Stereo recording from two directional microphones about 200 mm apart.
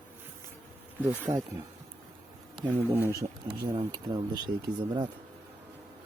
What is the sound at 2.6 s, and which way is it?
Speech, 10° right (ahead or behind).